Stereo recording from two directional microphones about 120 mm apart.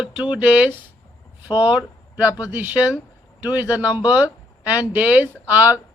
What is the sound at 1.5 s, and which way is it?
Speech, 40° left (ahead or behind).